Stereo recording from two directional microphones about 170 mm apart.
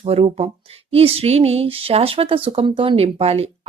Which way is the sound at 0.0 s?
35° right (ahead or behind).